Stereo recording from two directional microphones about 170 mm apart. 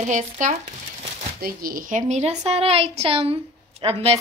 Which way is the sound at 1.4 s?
55° right (ahead or behind).